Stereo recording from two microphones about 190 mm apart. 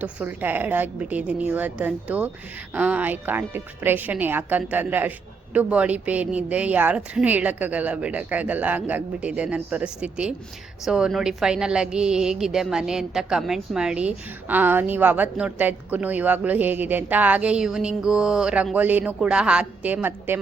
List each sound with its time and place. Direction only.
0.0 s a woman's voice: 10° right (ahead or behind)